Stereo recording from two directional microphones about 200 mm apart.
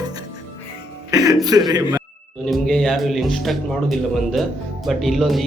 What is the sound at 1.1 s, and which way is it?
Speech, 20° right (ahead or behind).